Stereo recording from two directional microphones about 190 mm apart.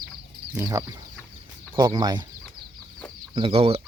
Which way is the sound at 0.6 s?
15° right (ahead or behind).